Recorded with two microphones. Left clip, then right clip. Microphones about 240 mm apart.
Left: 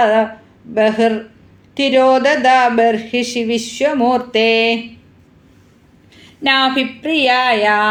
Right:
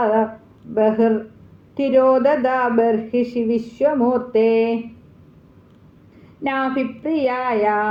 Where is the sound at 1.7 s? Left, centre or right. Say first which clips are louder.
Left 4 dB; left.